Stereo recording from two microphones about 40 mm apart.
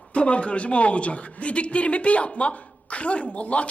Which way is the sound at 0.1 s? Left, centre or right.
Left.